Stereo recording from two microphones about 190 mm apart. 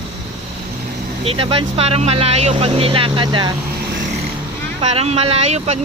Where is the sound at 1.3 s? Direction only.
30° right (ahead or behind).